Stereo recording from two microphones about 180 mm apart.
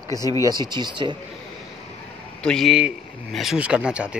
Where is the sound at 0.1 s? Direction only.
20° left (ahead or behind).